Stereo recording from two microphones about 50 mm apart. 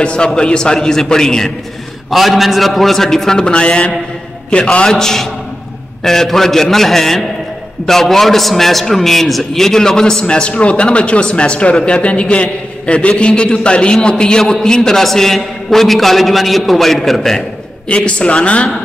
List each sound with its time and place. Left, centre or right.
0.0 s a man's voice: centre
2.0 s a man's voice: centre
17.8 s a man's voice: left